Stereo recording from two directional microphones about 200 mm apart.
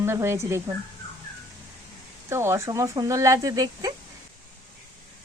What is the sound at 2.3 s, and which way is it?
Speech, 15° right (ahead or behind).